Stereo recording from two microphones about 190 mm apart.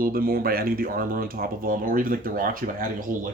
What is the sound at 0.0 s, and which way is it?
Speech, 50° right (ahead or behind).